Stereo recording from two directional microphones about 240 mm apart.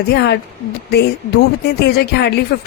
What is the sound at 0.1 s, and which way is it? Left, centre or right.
A woman's voice, left.